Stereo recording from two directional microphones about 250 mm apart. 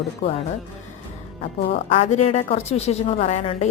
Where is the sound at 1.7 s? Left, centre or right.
Left.